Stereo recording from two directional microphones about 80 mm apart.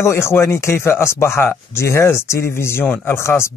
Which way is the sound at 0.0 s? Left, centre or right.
Left.